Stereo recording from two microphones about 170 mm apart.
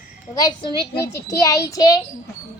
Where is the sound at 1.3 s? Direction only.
20° left (ahead or behind).